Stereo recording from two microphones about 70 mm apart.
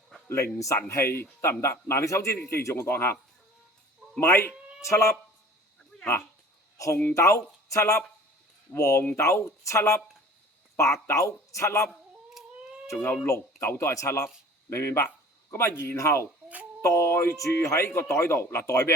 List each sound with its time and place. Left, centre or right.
0.3 s a man's voice: left
4.2 s a man's voice: left
4.8 s speech: left
5.9 s a sound: centre
7.1 s a man's voice: left
13.6 s a man's voice: left
18.5 s speech: left